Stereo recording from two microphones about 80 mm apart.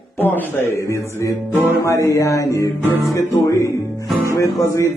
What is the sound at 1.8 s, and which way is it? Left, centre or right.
Music, left.